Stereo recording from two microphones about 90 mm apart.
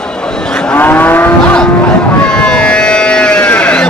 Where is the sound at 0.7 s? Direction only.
20° left (ahead or behind).